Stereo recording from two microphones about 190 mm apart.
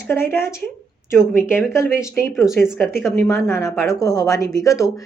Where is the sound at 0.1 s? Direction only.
10° left (ahead or behind).